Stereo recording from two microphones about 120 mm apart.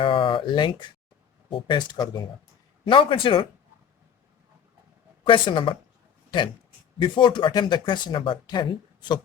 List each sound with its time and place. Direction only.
0.0 s a sound: 45° left (ahead or behind)
1.5 s speech: 45° left (ahead or behind)
5.2 s speech: 40° left (ahead or behind)
7.0 s speech: 40° left (ahead or behind)